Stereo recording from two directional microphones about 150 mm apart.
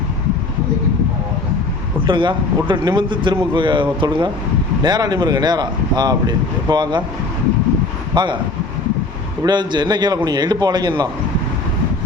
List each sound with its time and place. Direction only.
2.0 s speech: 30° right (ahead or behind)
8.1 s speech: 30° right (ahead or behind)
9.4 s speech: 30° right (ahead or behind)